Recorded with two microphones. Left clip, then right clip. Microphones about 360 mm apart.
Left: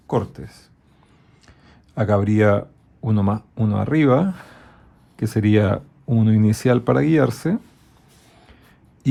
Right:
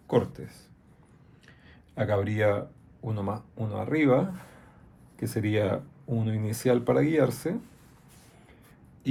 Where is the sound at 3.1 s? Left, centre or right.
Left.